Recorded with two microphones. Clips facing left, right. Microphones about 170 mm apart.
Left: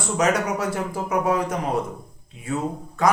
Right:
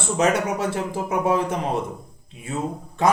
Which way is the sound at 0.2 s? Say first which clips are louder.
Right 1 dB; 25° right (ahead or behind).